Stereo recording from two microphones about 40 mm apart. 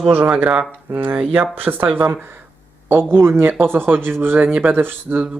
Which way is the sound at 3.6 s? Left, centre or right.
Right.